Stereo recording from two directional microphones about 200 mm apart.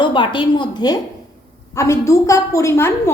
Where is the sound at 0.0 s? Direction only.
25° left (ahead or behind).